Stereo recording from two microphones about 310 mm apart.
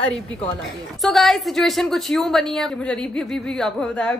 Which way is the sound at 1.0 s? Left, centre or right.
Centre.